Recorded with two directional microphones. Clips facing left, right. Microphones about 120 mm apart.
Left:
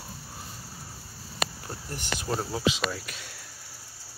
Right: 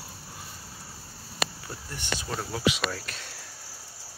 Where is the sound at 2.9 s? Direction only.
10° left (ahead or behind).